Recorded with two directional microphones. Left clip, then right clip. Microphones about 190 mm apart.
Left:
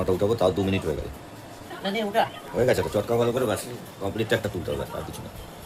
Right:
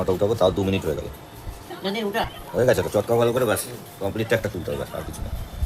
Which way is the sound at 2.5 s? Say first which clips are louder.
Right 3 dB; 15° right (ahead or behind).